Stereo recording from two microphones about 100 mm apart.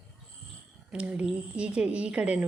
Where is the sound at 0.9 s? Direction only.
10° right (ahead or behind).